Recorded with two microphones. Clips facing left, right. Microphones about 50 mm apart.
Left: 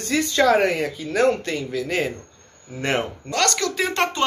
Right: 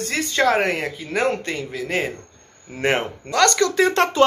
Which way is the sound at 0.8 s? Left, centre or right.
Centre.